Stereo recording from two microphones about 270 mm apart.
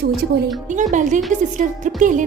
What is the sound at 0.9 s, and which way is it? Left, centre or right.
A woman's voice, right.